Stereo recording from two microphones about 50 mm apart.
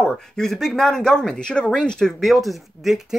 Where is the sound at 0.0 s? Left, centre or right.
Centre.